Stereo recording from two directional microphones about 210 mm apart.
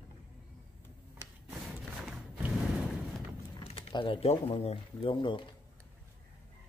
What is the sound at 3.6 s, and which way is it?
Speech, 25° left (ahead or behind).